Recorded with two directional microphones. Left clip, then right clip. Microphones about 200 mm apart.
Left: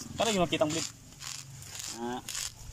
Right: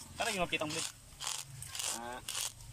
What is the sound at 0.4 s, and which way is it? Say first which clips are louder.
Speech: left 7 dB; 25° left (ahead or behind).